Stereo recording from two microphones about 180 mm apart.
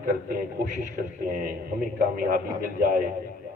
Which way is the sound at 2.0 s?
50° right (ahead or behind).